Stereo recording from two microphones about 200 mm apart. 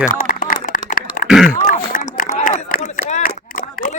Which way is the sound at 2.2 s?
40° left (ahead or behind).